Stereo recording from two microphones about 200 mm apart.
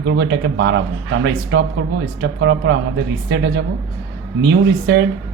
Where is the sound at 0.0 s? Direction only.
55° right (ahead or behind).